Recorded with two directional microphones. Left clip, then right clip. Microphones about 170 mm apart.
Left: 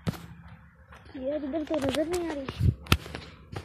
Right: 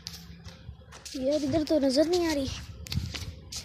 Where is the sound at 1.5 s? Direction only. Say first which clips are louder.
Right 4 dB; 55° right (ahead or behind).